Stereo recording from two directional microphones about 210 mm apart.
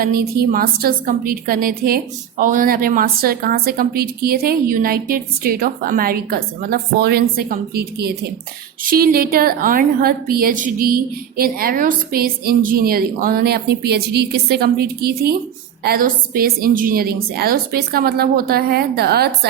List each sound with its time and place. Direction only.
0.0 s a woman's voice: 45° right (ahead or behind)